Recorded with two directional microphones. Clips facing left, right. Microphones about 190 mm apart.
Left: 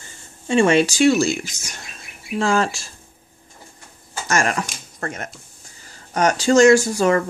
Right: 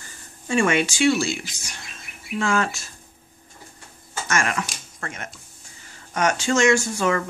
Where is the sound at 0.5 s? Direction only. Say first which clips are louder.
Left 5 dB; 30° left (ahead or behind); by 1.8 s 45° left (ahead or behind).